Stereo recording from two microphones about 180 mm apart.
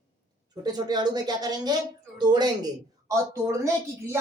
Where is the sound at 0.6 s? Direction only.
25° right (ahead or behind).